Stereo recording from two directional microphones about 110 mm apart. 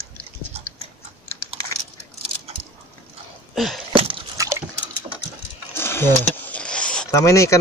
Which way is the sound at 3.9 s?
50° right (ahead or behind).